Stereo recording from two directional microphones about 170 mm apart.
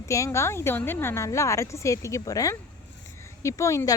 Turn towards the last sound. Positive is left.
turn(degrees=20)  # may be behind; listen again after turning